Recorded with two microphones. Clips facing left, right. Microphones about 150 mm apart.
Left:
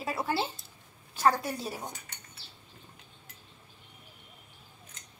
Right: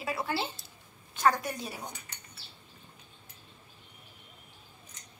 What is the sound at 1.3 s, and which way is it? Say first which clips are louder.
Speech: left 2 dB; 35° left (ahead or behind).